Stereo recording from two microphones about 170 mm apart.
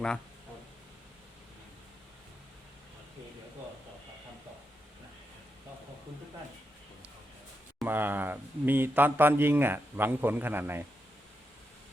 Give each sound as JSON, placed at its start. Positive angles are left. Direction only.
{"t": 7.9, "sound": "speech", "side_deg": -10}